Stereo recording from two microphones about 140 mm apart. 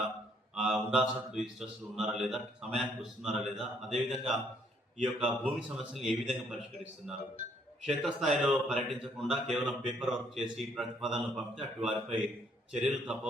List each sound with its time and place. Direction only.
0.5 s a man's voice: 5° right (ahead or behind)
7.9 s a man's voice: centre (ahead or behind)